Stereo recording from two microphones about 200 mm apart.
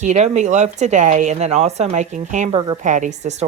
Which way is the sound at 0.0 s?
35° right (ahead or behind).